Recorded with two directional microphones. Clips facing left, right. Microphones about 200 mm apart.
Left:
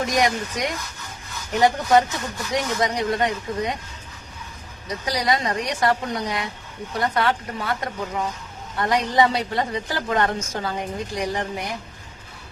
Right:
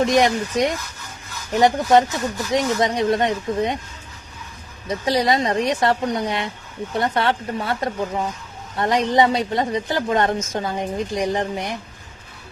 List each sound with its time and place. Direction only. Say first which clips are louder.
0.0 s speech: right 5 dB; 25° right (ahead or behind)
4.9 s speech: right 4 dB; 25° right (ahead or behind)